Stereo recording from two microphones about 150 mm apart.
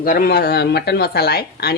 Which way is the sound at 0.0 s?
70° left (ahead or behind).